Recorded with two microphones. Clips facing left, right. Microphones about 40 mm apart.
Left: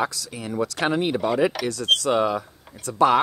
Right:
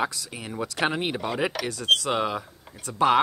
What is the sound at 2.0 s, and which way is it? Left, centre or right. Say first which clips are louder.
Speech: left 5 dB; right.